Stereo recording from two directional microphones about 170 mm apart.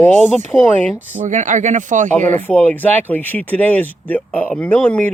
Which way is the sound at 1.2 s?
45° right (ahead or behind).